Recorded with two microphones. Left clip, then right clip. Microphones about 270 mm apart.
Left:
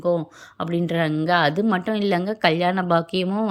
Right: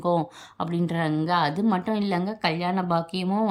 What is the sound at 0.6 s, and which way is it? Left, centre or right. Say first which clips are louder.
A woman's voice: left 4 dB; centre.